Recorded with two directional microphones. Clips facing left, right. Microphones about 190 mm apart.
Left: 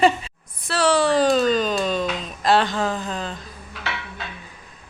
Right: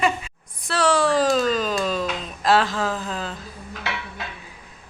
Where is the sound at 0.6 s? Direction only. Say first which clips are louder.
Left 1 dB; centre (ahead or behind).